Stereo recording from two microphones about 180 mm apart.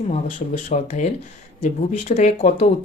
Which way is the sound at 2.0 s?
40° left (ahead or behind).